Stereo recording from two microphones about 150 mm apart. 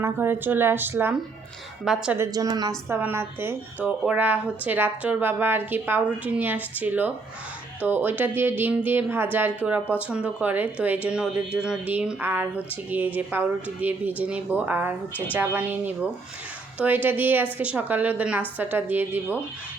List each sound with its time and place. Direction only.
0.0 s a woman's voice: 15° right (ahead or behind)
2.1 s a woman's voice: 20° right (ahead or behind)
2.9 s speech: 15° right (ahead or behind)